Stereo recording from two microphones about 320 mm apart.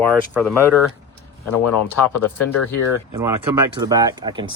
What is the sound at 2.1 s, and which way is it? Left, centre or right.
Speech, left.